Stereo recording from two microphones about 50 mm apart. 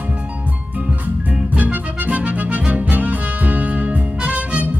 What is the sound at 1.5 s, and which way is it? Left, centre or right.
Music, right.